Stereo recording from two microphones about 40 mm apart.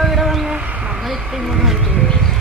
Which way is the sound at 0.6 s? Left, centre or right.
Right.